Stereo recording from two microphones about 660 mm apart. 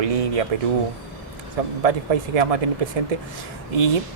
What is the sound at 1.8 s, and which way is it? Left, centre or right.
Speech, right.